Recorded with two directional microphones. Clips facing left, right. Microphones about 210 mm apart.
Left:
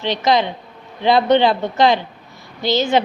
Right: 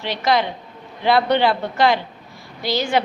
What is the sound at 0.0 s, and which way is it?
A woman's voice, 20° left (ahead or behind).